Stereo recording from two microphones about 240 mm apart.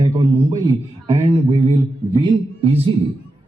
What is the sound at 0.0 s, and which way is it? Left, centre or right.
A man's voice, centre.